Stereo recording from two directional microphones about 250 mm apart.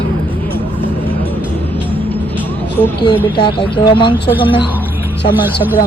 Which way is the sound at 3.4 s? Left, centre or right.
Centre.